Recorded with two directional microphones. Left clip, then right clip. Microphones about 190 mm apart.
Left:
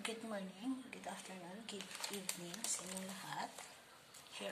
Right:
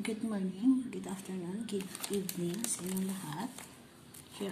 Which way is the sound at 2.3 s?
15° right (ahead or behind).